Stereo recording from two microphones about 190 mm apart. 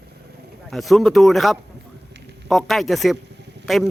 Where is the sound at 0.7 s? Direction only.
Centre (ahead or behind).